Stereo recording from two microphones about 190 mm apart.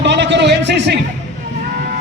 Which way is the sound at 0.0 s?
65° right (ahead or behind).